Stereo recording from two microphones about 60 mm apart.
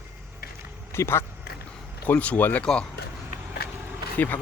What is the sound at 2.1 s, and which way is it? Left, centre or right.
Speech, left.